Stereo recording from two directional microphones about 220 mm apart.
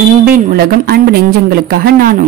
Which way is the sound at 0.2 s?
40° right (ahead or behind).